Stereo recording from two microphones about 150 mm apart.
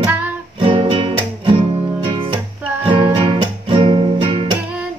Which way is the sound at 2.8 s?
35° right (ahead or behind).